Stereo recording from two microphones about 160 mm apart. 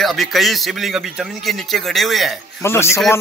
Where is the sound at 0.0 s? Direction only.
Centre (ahead or behind).